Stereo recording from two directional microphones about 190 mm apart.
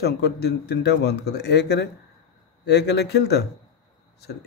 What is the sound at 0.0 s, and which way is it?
Speech, 60° left (ahead or behind).